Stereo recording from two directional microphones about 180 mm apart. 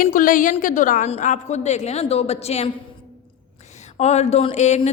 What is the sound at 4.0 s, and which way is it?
Speech, 35° left (ahead or behind).